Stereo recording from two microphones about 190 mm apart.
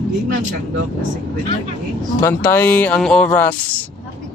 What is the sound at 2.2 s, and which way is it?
Speech, 10° left (ahead or behind).